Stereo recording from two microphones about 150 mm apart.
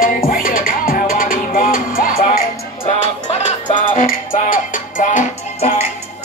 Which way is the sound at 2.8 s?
45° left (ahead or behind).